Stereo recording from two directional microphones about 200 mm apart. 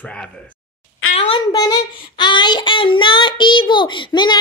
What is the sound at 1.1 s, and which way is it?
Child singing, 25° left (ahead or behind).